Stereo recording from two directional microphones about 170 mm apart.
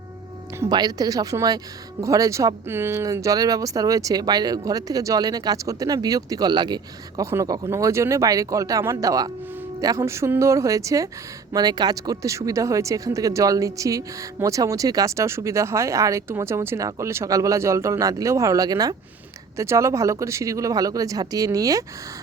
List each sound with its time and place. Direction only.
0.6 s speech: 25° right (ahead or behind)